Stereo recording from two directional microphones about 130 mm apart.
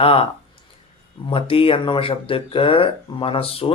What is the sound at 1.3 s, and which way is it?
Speech, 45° left (ahead or behind).